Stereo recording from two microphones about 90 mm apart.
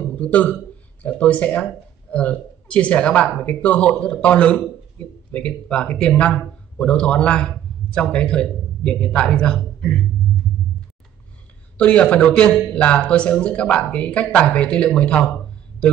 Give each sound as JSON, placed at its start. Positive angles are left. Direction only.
{"t": 0.1, "sound": "a man's voice", "side_deg": 15}
{"t": 11.7, "sound": "speech", "side_deg": 15}